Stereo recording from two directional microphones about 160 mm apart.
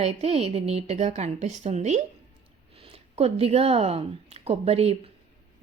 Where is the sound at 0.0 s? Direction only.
40° right (ahead or behind).